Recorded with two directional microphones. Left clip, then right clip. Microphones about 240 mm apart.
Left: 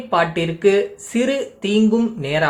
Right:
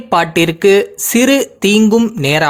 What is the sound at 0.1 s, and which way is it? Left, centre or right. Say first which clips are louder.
Speech: right 6 dB; right.